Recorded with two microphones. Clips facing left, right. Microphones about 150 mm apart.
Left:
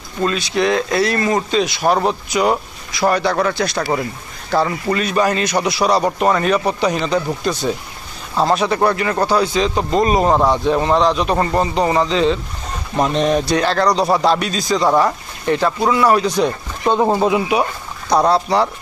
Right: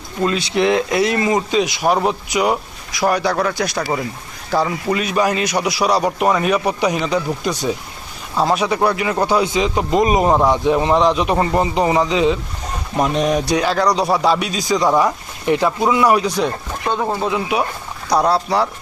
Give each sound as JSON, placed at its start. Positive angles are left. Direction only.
{"t": 0.3, "sound": "a man's voice", "side_deg": -25}
{"t": 3.8, "sound": "speech", "side_deg": 5}
{"t": 4.5, "sound": "a man's voice", "side_deg": -10}
{"t": 9.2, "sound": "a man's voice", "side_deg": -20}
{"t": 16.9, "sound": "speech", "side_deg": 25}
{"t": 17.5, "sound": "speech", "side_deg": 0}